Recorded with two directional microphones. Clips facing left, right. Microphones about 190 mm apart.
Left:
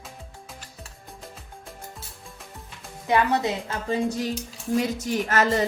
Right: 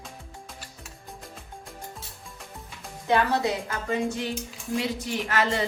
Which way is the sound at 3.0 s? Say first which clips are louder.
Left 1 dB; 20° left (ahead or behind).